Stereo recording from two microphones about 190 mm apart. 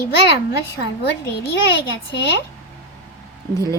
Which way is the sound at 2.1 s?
65° left (ahead or behind).